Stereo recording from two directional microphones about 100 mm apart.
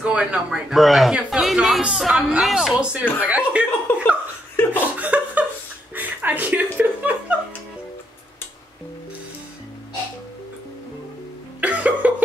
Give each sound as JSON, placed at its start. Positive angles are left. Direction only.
{"t": 0.0, "sound": "speech", "side_deg": -10}
{"t": 3.9, "sound": "laughter", "side_deg": 20}
{"t": 4.9, "sound": "chuckle", "side_deg": -15}
{"t": 11.6, "sound": "a sound", "side_deg": -15}